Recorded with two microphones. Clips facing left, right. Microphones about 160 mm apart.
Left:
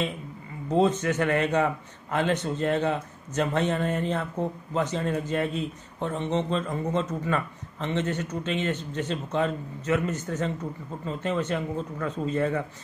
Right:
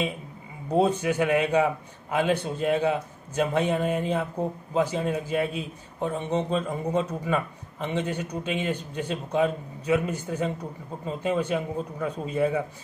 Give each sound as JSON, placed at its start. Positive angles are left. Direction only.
{"t": 0.7, "sound": "a man's voice", "side_deg": -10}